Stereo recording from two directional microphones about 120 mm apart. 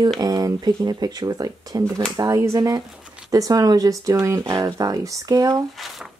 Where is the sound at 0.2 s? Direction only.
30° right (ahead or behind).